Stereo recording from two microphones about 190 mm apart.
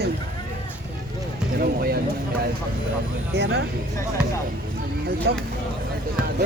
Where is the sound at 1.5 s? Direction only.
50° right (ahead or behind).